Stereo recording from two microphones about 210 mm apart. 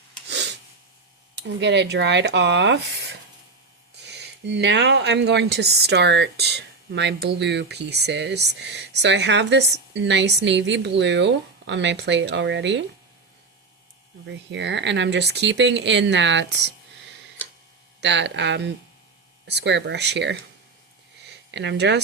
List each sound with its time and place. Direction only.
0.3 s a sound: 55° right (ahead or behind)
1.4 s speech: 60° right (ahead or behind)
14.3 s speech: 55° right (ahead or behind)
18.0 s speech: 55° right (ahead or behind)
21.5 s speech: 55° right (ahead or behind)